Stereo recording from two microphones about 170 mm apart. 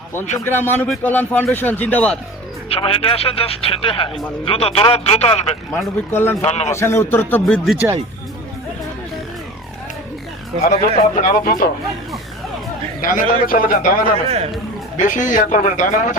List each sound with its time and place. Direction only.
0.3 s a man's voice: 15° left (ahead or behind)
2.6 s speech: 35° left (ahead or behind)
5.7 s a man's voice: 15° left (ahead or behind)
6.4 s speech: 40° left (ahead or behind)
6.7 s a man's voice: 15° left (ahead or behind)
10.9 s a man's voice: 45° left (ahead or behind)
13.0 s a man's voice: 55° left (ahead or behind)
14.3 s speech: 35° right (ahead or behind)
14.9 s speech: 45° left (ahead or behind)